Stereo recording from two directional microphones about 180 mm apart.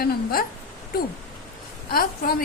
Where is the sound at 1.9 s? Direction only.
55° left (ahead or behind).